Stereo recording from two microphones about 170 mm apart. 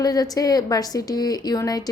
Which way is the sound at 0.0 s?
20° left (ahead or behind).